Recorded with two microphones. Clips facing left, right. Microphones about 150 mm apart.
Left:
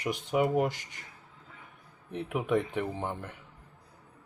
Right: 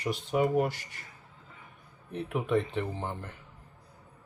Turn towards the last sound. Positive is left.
turn(degrees=15)  # may be behind; listen again after turning